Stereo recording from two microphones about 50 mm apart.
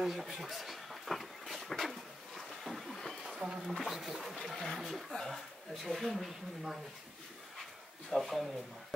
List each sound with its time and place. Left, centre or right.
0.0 s a sound: centre
3.3 s speech: centre
8.1 s speech: centre